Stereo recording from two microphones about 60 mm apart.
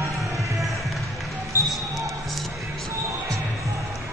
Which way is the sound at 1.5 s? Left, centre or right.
Left.